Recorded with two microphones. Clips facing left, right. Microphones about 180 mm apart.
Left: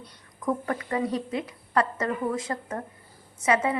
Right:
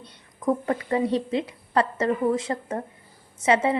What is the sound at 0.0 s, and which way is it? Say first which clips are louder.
A woman's voice: right 4 dB; 25° right (ahead or behind).